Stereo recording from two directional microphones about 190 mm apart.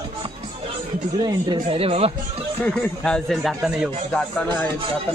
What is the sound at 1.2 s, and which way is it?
Speech, 25° right (ahead or behind).